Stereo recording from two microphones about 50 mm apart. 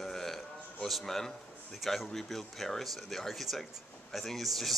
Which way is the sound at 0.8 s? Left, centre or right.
Centre.